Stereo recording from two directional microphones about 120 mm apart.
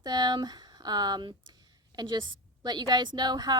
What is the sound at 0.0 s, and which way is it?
Speech, 35° right (ahead or behind).